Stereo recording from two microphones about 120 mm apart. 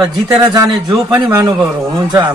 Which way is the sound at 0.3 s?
30° right (ahead or behind).